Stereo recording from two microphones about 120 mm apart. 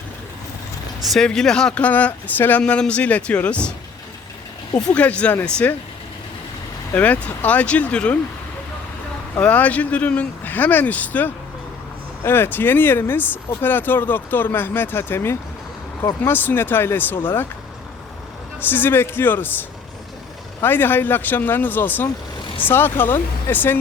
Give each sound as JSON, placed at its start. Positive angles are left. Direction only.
{"t": 1.1, "sound": "speech", "side_deg": 5}
{"t": 4.9, "sound": "speech", "side_deg": 10}
{"t": 6.9, "sound": "speech", "side_deg": 10}
{"t": 9.3, "sound": "speech", "side_deg": 10}
{"t": 18.7, "sound": "speech", "side_deg": 15}
{"t": 20.6, "sound": "speech", "side_deg": 15}